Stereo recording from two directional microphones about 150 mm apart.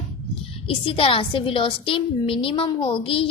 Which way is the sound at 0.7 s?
35° left (ahead or behind).